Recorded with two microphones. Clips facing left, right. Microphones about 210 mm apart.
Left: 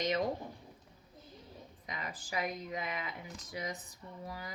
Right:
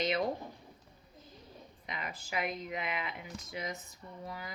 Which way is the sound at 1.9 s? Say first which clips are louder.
Right 1 dB; 35° left (ahead or behind).